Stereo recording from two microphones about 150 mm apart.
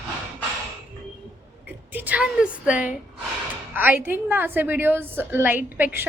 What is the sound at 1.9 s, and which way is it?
A woman's voice, 10° right (ahead or behind).